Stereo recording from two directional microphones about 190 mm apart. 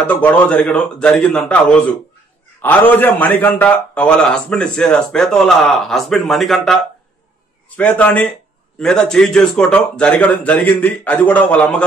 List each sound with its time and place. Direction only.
0.0 s a man's voice: 5° left (ahead or behind)